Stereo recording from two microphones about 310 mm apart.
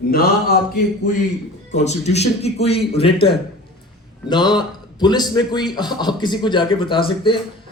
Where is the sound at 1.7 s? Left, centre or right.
Left.